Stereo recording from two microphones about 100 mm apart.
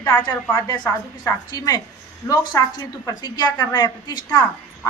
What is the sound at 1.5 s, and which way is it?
A woman's voice, 35° left (ahead or behind).